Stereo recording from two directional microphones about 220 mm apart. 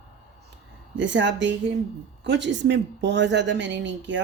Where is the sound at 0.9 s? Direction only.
55° right (ahead or behind).